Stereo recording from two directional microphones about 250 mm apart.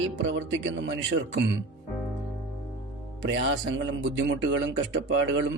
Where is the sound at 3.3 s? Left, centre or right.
Right.